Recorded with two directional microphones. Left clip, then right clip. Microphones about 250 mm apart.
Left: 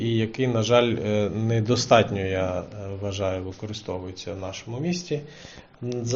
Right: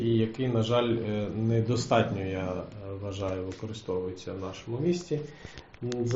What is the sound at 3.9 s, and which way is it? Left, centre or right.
A man's voice, left.